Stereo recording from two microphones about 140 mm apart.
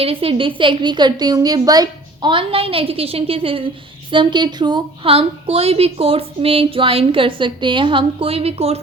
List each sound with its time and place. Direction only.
0.0 s a woman's voice: 40° right (ahead or behind)